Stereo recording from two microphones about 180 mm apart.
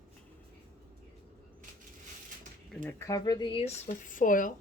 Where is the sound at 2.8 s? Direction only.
15° left (ahead or behind); by 4.5 s 50° left (ahead or behind).